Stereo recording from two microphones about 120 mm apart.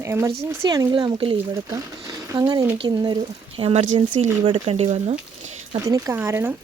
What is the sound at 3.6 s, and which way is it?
Speech, 50° right (ahead or behind).